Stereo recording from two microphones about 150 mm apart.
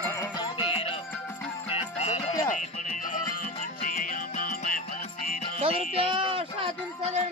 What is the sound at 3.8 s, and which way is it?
Music, 65° left (ahead or behind).